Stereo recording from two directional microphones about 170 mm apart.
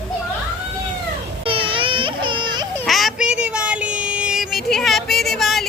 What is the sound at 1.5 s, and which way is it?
Music, 30° right (ahead or behind).